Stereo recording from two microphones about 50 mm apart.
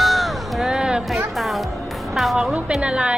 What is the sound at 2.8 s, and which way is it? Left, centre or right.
Speech, right.